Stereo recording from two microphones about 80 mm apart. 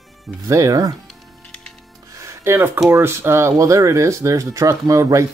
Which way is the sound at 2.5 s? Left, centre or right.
Right.